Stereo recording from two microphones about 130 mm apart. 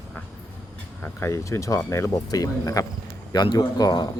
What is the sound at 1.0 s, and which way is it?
Speech, 20° left (ahead or behind).